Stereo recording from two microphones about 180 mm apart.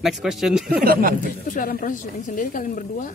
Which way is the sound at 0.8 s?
55° right (ahead or behind).